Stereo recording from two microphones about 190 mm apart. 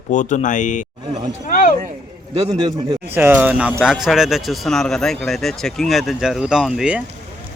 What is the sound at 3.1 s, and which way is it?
Speech, 10° right (ahead or behind).